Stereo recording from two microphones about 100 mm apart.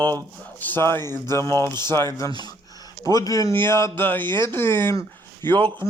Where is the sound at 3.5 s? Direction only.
25° left (ahead or behind).